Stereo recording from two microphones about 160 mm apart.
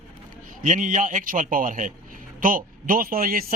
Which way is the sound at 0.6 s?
55° right (ahead or behind).